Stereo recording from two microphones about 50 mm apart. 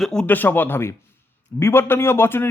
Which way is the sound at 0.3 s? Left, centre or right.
Left.